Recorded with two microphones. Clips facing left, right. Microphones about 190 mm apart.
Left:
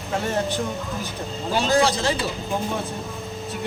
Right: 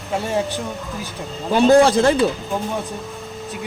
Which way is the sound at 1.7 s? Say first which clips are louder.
Right 8 dB; 55° right (ahead or behind).